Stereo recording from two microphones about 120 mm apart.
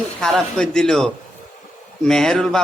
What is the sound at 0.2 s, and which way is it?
A man's voice, centre (ahead or behind).